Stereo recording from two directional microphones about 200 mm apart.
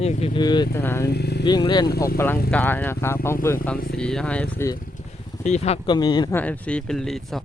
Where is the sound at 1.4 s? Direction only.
25° left (ahead or behind).